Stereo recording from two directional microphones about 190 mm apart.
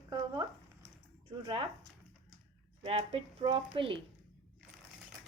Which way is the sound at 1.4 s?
25° right (ahead or behind).